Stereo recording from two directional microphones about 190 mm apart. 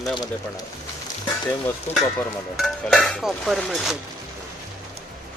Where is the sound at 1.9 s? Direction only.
35° left (ahead or behind).